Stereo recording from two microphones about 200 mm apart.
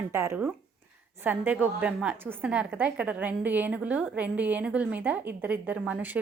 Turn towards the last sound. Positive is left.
turn(degrees=-10)  # may be behind; listen again after turning